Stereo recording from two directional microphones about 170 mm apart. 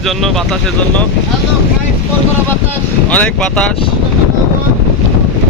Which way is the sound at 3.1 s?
5° left (ahead or behind).